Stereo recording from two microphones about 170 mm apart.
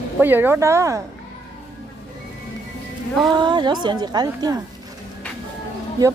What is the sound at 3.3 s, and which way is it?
A woman's voice, 25° right (ahead or behind).